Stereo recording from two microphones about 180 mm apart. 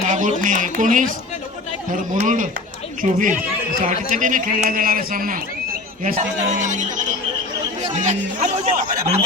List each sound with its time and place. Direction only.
0.0 s speech: 45° right (ahead or behind)
8.4 s speech: 45° right (ahead or behind)